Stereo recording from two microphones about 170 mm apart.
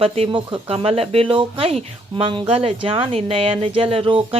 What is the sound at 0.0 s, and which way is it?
Speech, 35° right (ahead or behind).